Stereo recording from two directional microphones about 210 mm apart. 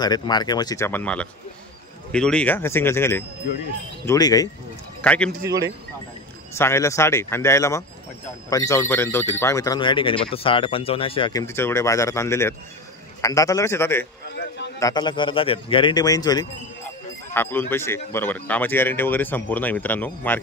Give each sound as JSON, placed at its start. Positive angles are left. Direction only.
{"t": 0.0, "sound": "speech", "side_deg": 20}
{"t": 5.0, "sound": "speech", "side_deg": 5}
{"t": 6.5, "sound": "speech", "side_deg": 10}